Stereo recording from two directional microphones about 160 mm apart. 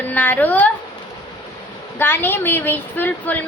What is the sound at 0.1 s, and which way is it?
Speech, 10° left (ahead or behind).